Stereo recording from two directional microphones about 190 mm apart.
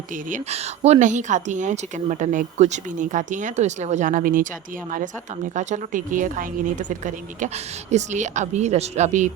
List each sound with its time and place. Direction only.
0.3 s speech: 40° right (ahead or behind)
5.5 s a woman's voice: 40° right (ahead or behind)